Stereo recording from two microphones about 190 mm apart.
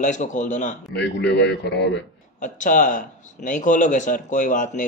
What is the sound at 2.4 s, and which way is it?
Speech, 45° left (ahead or behind).